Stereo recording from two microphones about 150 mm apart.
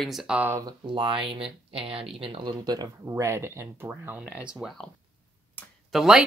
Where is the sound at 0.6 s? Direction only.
35° right (ahead or behind); by 4.9 s 5° right (ahead or behind).